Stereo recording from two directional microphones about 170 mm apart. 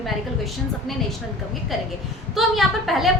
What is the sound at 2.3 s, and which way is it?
Speech, centre (ahead or behind).